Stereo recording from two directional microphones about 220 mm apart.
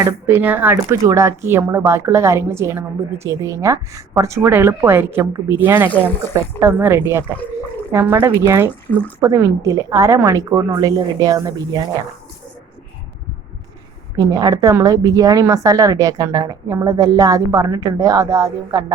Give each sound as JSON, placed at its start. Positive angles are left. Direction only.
{"t": 0.0, "sound": "a woman's voice", "side_deg": -10}
{"t": 8.9, "sound": "speech", "side_deg": 5}
{"t": 9.2, "sound": "a woman's voice", "side_deg": -15}
{"t": 14.2, "sound": "a woman's voice", "side_deg": -15}